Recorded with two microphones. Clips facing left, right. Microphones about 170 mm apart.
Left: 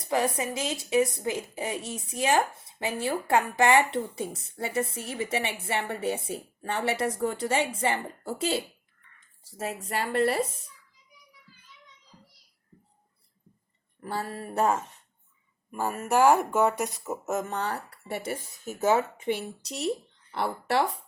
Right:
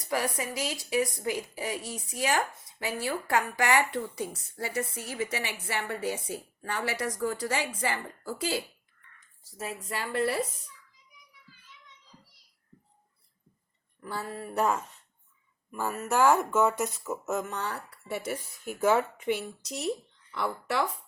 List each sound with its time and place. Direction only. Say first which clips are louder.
0.0 s a woman's voice: left 4 dB; 25° left (ahead or behind)
10.1 s speech: left 3 dB; 65° left (ahead or behind)
10.4 s a woman's voice: left 2 dB; 30° left (ahead or behind)
14.0 s speech: left 3 dB; 65° left (ahead or behind)
14.6 s a woman's voice: left 2 dB; 30° left (ahead or behind)
15.7 s speech: left 3 dB; 15° left (ahead or behind)
17.7 s speech: left 2 dB; 60° left (ahead or behind)
18.9 s a woman's voice: left 1 dB; 20° left (ahead or behind)
19.6 s speech: left 3 dB; 65° left (ahead or behind)